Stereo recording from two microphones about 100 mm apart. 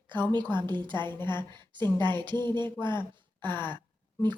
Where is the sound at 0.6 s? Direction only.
45° right (ahead or behind).